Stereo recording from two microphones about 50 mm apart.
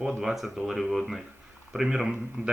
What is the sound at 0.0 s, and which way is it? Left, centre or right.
Speech, centre.